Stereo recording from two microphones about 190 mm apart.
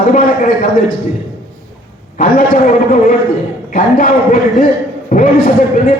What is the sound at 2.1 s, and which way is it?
A man's voice, 45° left (ahead or behind).